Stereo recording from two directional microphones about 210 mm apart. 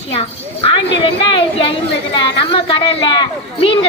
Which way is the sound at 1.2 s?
25° left (ahead or behind).